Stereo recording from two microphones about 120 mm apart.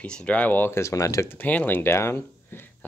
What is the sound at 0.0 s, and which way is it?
Speech, 10° left (ahead or behind).